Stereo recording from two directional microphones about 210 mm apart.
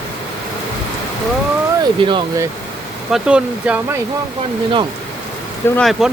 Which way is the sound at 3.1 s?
5° right (ahead or behind).